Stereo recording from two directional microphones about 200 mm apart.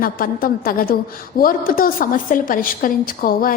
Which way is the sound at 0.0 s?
45° left (ahead or behind).